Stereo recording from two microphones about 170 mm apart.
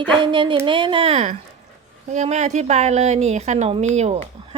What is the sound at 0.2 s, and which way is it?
Speech, 30° right (ahead or behind).